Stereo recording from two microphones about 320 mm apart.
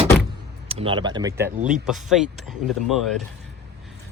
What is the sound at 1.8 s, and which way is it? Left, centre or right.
Speech, centre.